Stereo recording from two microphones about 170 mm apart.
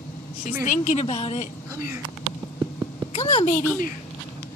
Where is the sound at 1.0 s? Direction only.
35° left (ahead or behind).